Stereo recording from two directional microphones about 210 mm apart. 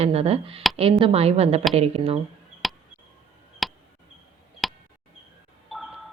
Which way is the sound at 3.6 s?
Centre (ahead or behind).